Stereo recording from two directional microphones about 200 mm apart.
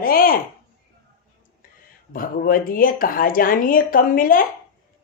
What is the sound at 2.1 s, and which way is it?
A woman's voice, 45° left (ahead or behind).